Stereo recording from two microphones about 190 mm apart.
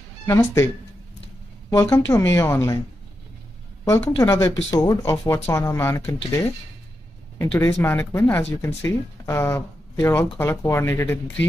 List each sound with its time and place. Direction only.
0.3 s speech: 15° left (ahead or behind)
1.7 s speech: 15° left (ahead or behind)
3.8 s speech: 15° left (ahead or behind)
7.3 s speech: 15° left (ahead or behind)